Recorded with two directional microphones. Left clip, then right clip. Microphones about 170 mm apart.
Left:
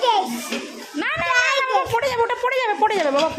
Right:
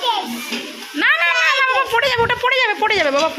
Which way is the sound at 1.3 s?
55° left (ahead or behind).